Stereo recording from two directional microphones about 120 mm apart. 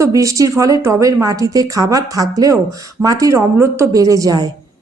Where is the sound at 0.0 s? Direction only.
25° right (ahead or behind).